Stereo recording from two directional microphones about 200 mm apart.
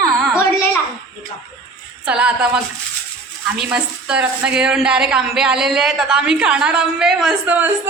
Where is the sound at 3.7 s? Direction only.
5° right (ahead or behind).